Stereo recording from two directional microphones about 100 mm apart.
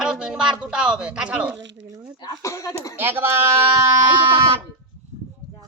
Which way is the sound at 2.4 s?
30° left (ahead or behind).